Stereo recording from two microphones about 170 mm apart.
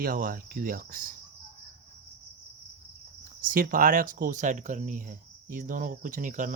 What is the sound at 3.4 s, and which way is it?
Speech, 55° right (ahead or behind).